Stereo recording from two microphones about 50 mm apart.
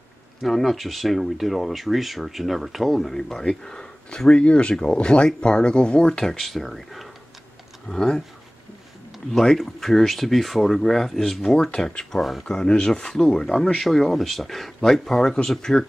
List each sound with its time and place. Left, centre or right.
0.4 s speech: centre
9.3 s speech: centre
12.2 s speech: centre
12.4 s speech: centre